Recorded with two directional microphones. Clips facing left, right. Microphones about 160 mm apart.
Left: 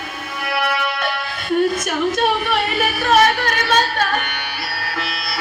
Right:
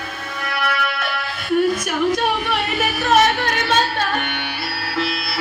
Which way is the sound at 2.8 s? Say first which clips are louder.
Even; 20° right (ahead or behind).